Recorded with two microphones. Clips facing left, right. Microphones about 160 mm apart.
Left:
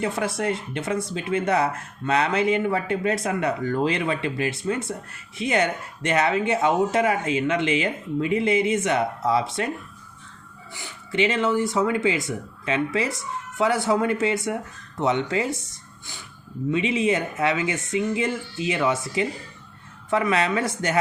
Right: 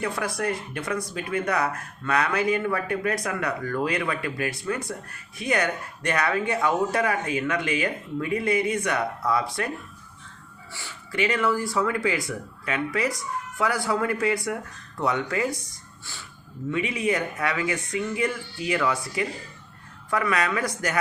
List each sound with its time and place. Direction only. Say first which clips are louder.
0.0 s speech: left 3 dB; 25° left (ahead or behind)
10.8 s speech: left 4 dB; 20° left (ahead or behind)